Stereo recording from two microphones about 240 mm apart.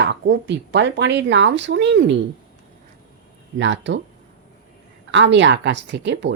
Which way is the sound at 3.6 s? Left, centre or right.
Right.